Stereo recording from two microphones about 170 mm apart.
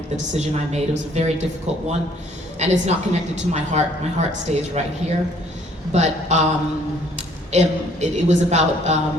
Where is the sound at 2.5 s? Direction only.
40° right (ahead or behind).